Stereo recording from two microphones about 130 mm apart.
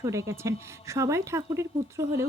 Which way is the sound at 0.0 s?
25° right (ahead or behind).